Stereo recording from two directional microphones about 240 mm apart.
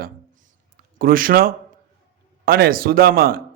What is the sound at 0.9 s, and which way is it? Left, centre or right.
A man's voice, right.